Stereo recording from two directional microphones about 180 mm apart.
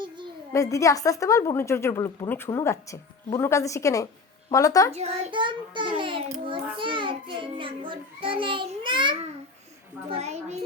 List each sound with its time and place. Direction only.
0.5 s a woman's voice: 20° left (ahead or behind)
4.9 s child singing: 35° right (ahead or behind)
10.1 s a child's voice: 35° right (ahead or behind)